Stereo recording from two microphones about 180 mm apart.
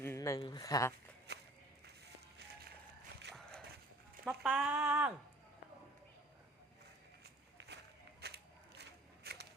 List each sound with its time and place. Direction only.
0.0 s speech: 15° left (ahead or behind)
1.3 s walk: 65° right (ahead or behind)
3.3 s clip-clop: 5° left (ahead or behind)
4.4 s speech: 5° right (ahead or behind)
7.6 s walk: 70° right (ahead or behind)
8.2 s a sound: 65° right (ahead or behind)